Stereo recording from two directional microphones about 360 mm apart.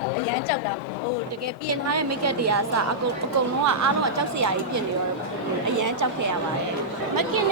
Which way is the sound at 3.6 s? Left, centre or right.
Right.